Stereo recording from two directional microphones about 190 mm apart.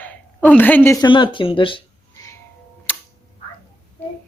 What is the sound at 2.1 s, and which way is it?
Music, 15° left (ahead or behind).